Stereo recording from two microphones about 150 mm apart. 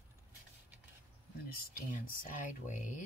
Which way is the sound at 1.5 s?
70° left (ahead or behind).